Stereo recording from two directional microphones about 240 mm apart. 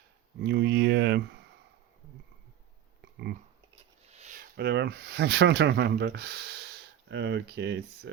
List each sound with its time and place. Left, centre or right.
0.3 s speech: right
3.0 s a sound: right
4.1 s speech: right